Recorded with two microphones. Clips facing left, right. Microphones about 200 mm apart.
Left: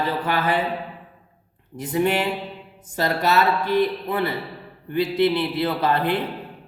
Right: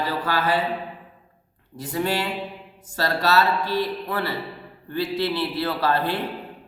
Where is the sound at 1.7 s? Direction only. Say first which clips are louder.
Left 4 dB; 20° left (ahead or behind).